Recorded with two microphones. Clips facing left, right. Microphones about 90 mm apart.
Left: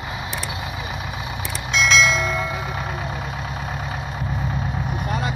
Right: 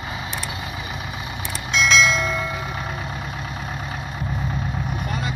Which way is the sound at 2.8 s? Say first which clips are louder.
Left 2 dB; 25° left (ahead or behind).